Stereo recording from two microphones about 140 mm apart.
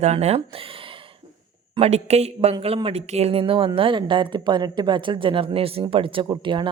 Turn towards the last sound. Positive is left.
turn(degrees=-35)  # may be behind; listen again after turning